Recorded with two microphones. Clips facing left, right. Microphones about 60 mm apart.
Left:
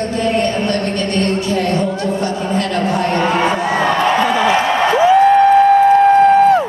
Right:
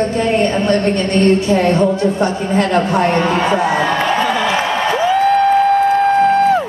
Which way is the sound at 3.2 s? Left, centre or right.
Centre.